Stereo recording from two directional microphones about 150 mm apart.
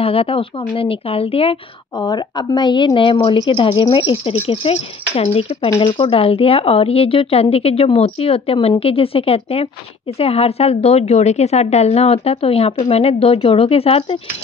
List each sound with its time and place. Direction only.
0.0 s a woman's voice: 40° left (ahead or behind)